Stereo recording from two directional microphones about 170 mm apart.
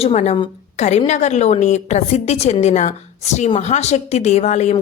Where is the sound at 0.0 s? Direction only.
40° left (ahead or behind).